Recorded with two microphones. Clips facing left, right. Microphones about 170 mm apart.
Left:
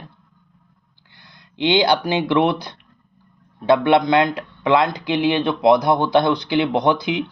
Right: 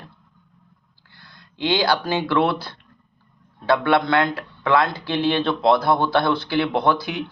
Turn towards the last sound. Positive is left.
turn(degrees=20)  # may be behind; listen again after turning